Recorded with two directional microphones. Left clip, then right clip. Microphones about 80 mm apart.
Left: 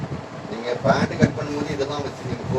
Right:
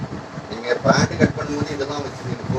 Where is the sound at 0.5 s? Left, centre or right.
Right.